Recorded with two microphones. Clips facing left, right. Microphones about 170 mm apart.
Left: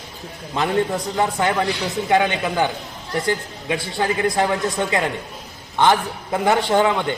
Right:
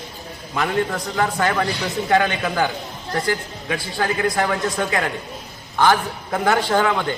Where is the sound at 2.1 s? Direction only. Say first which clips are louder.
Left 1 dB; 20° left (ahead or behind).